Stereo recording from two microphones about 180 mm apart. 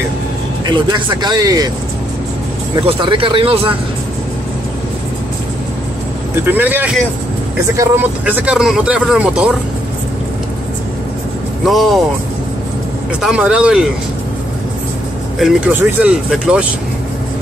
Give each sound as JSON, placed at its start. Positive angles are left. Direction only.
{"t": 0.7, "sound": "speech", "side_deg": -25}
{"t": 2.7, "sound": "speech", "side_deg": -30}
{"t": 6.4, "sound": "speech", "side_deg": -10}
{"t": 11.6, "sound": "speech", "side_deg": 0}
{"t": 13.2, "sound": "speech", "side_deg": -5}
{"t": 15.3, "sound": "speech", "side_deg": -5}